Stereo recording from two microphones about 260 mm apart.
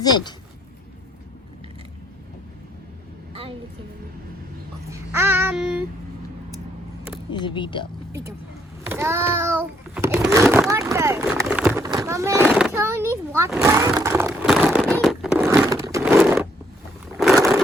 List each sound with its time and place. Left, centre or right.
4.9 s babbling: centre
7.3 s speech: centre
8.9 s child singing: centre
10.5 s a sound: centre